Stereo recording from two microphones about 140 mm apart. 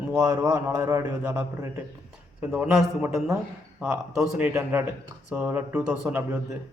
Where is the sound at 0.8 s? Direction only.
15° right (ahead or behind).